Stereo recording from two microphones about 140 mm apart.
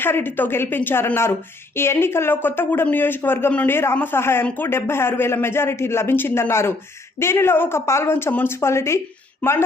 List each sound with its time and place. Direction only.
0.0 s a woman's voice: 15° left (ahead or behind)